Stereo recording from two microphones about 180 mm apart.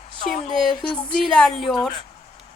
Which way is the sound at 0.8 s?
5° left (ahead or behind).